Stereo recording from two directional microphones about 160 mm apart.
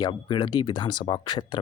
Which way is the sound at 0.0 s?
30° left (ahead or behind).